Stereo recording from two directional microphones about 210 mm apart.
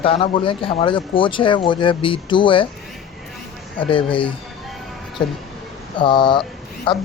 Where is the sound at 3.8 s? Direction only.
25° left (ahead or behind).